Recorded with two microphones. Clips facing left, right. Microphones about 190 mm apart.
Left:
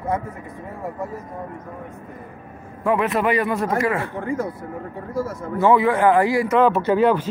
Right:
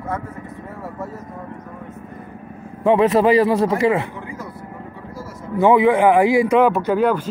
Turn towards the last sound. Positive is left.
turn(degrees=-5)  # may be behind; listen again after turning